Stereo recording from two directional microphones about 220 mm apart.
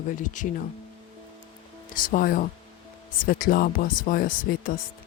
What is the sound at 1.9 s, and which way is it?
Speech, 40° left (ahead or behind).